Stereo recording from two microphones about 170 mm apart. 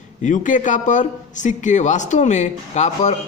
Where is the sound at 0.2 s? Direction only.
50° left (ahead or behind).